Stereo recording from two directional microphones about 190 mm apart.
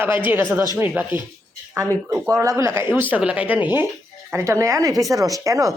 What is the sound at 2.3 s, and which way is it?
Speech, 15° right (ahead or behind).